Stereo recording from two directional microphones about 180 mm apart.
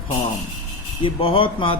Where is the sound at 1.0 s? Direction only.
30° left (ahead or behind).